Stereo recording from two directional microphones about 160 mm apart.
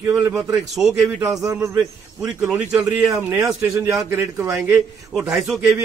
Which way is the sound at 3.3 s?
15° right (ahead or behind).